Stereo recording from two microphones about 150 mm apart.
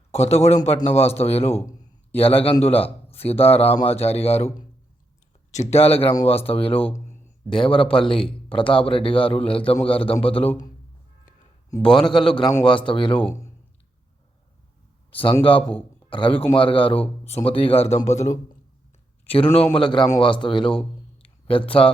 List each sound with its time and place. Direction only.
0.1 s a man's voice: 45° left (ahead or behind)
6.8 s speech: 15° left (ahead or behind)
7.5 s a man's voice: 35° left (ahead or behind)
11.8 s a man's voice: 35° left (ahead or behind)
15.1 s a man's voice: 35° left (ahead or behind)
19.7 s a man's voice: 35° left (ahead or behind)